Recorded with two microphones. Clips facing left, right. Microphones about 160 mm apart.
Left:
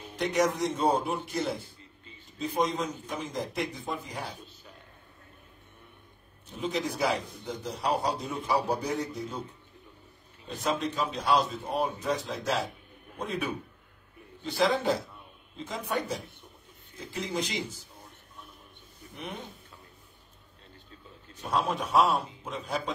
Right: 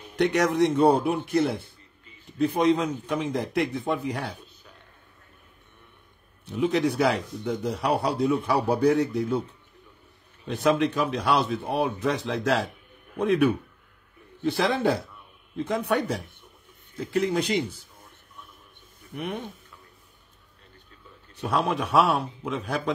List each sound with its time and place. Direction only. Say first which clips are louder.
0.2 s a man's voice: right 5 dB; 75° right (ahead or behind)
6.4 s a man's voice: right 8 dB; 70° right (ahead or behind)
10.5 s a man's voice: right 8 dB; 65° right (ahead or behind)
16.9 s a man's voice: right 9 dB; 65° right (ahead or behind)
18.9 s a sound: right 8 dB; 55° right (ahead or behind)
21.4 s a man's voice: right 4 dB; 70° right (ahead or behind)